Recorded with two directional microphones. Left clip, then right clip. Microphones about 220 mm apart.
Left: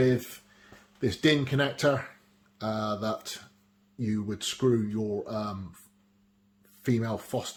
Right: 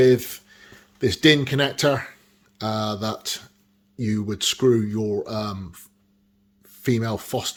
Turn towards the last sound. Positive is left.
turn(degrees=-35)  # may be behind; listen again after turning